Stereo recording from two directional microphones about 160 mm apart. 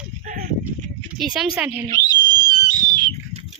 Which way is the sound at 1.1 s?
5° right (ahead or behind).